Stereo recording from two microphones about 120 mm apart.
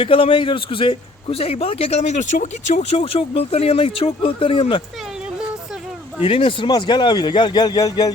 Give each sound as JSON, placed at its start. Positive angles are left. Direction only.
{"t": 0.0, "sound": "a man's voice", "side_deg": 50}
{"t": 6.2, "sound": "a man's voice", "side_deg": 50}